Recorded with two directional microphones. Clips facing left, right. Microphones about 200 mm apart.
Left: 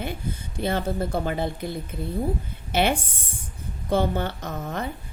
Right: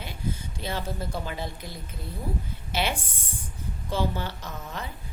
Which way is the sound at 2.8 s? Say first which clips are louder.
Left 7 dB; 55° left (ahead or behind).